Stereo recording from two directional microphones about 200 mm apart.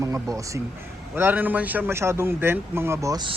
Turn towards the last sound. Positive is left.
turn(degrees=-20)  # may be behind; listen again after turning